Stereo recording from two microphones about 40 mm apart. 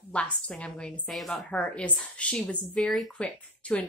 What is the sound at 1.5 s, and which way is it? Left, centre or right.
A woman's voice, left.